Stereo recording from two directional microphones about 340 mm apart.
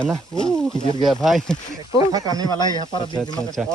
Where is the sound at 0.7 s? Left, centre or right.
Centre.